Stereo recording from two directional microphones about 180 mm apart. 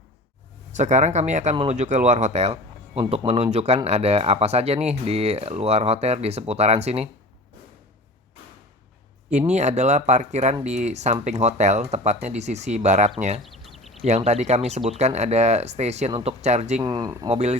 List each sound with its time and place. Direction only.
0.7 s speech: 40° right (ahead or behind)
9.5 s speech: 40° right (ahead or behind)
13.4 s a sound: centre (ahead or behind)
13.9 s speech: 35° right (ahead or behind)
16.8 s speech: 20° right (ahead or behind)
17.2 s speech: 35° right (ahead or behind)